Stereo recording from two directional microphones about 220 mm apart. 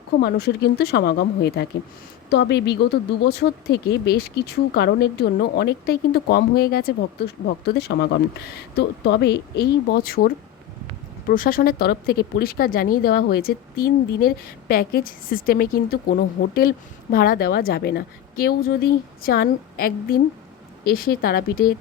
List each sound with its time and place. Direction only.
0.2 s speech: 45° left (ahead or behind)